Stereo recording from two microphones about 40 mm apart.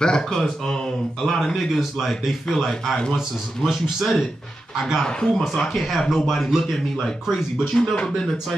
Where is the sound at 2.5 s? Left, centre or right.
Centre.